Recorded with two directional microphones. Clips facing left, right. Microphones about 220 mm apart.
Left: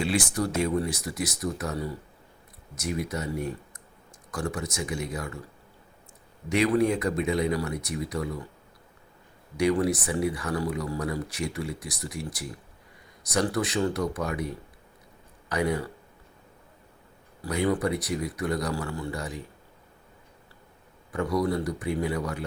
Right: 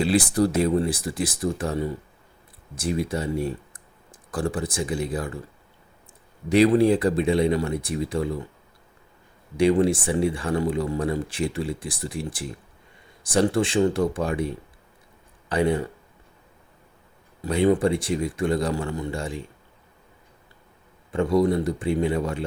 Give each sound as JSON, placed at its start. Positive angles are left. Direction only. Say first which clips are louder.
{"t": 0.0, "sound": "speech", "louder": "right 6 dB", "side_deg": -35}
{"t": 6.5, "sound": "speech", "louder": "right 6 dB", "side_deg": -30}
{"t": 9.6, "sound": "speech", "louder": "right 5 dB", "side_deg": -25}
{"t": 17.4, "sound": "speech", "louder": "right 6 dB", "side_deg": -25}
{"t": 21.1, "sound": "speech", "louder": "right 6 dB", "side_deg": -25}